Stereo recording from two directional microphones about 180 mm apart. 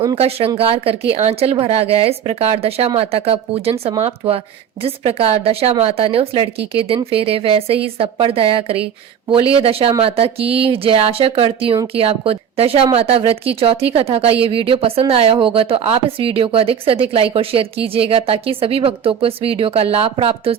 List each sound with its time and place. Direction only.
0.2 s a woman's voice: 35° right (ahead or behind)